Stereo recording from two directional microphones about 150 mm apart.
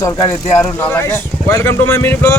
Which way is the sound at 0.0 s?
20° left (ahead or behind).